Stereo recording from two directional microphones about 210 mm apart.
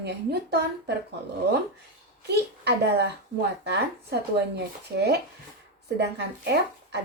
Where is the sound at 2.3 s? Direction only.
55° right (ahead or behind).